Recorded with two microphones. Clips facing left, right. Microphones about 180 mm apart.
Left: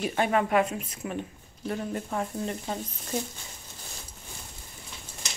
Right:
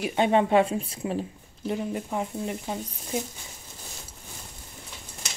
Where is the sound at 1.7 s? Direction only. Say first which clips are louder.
Right 2 dB; 10° right (ahead or behind).